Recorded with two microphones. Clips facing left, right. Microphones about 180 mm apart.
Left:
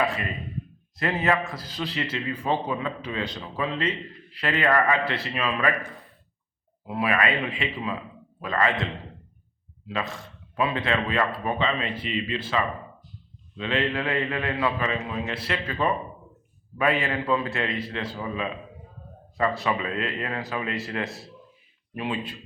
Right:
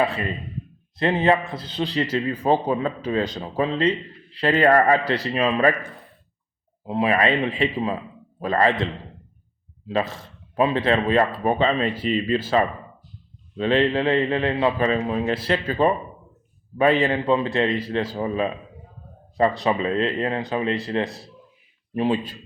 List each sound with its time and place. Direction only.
0.0 s a man's voice: 30° right (ahead or behind)
6.8 s a man's voice: 25° right (ahead or behind)
10.5 s a man's voice: 30° right (ahead or behind)
19.6 s a man's voice: 30° right (ahead or behind)